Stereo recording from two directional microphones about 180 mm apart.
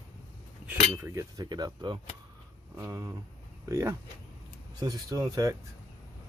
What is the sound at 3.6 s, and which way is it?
Speech, 15° right (ahead or behind).